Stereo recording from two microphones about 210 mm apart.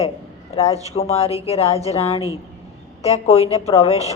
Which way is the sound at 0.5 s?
30° left (ahead or behind).